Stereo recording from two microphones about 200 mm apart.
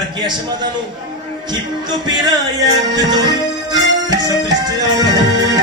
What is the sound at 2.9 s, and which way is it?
Music, 20° right (ahead or behind).